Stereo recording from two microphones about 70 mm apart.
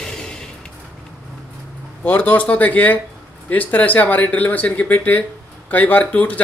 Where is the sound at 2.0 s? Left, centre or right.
Left.